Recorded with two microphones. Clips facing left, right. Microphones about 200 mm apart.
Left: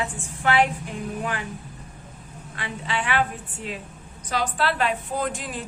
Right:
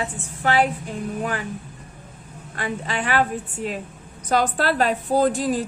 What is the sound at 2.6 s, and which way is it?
A woman's voice, 45° right (ahead or behind).